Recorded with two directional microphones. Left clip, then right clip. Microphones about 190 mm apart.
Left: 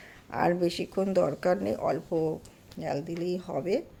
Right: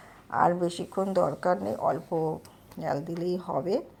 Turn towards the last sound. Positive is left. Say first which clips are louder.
# right 1 dB
turn(degrees=5)  # may be behind; listen again after turning